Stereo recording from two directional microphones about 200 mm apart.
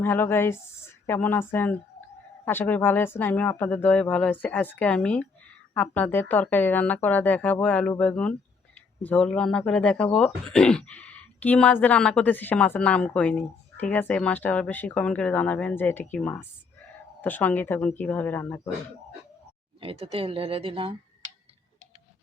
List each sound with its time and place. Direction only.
0.0 s speech: 10° left (ahead or behind)
19.8 s speech: 30° right (ahead or behind)